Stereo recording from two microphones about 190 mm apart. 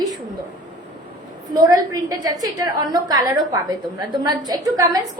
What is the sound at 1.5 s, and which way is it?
A woman's voice, 20° right (ahead or behind).